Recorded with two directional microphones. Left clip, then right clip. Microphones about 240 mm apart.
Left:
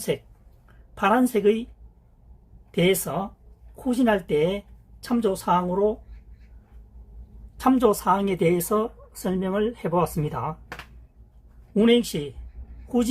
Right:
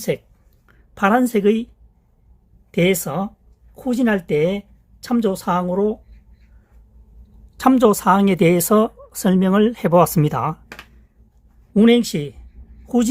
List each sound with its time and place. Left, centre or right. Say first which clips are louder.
0.9 s speech: right 4 dB; right
2.7 s speech: right 4 dB; right
7.6 s speech: right 6 dB; right
11.7 s speech: right 5 dB; right